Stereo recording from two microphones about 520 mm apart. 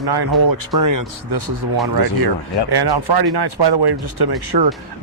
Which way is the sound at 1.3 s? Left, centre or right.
Right.